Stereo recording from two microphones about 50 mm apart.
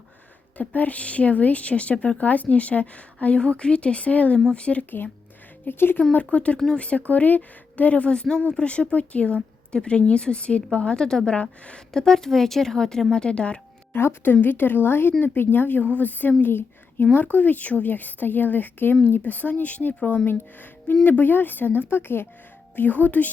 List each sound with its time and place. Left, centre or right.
0.5 s a woman's voice: left
4.9 s speech: left
6.1 s a woman's voice: left
11.9 s speech: centre
13.9 s speech: left
14.4 s speech: left
16.4 s a sound: left
17.3 s speech: left